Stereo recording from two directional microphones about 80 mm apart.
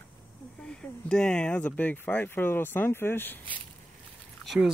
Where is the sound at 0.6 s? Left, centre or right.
Centre.